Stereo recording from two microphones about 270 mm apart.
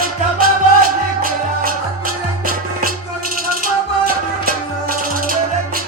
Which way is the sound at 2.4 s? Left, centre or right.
Right.